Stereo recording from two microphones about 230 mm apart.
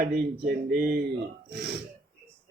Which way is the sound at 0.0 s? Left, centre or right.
Right.